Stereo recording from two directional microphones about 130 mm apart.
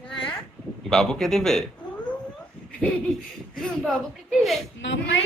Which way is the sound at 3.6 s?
Centre (ahead or behind).